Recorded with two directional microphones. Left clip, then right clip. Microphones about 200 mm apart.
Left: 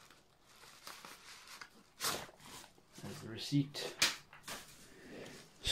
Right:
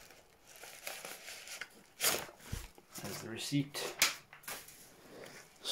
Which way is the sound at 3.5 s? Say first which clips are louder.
Even; 15° right (ahead or behind).